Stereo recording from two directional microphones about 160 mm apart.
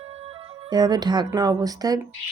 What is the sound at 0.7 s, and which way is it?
Speech, 25° right (ahead or behind).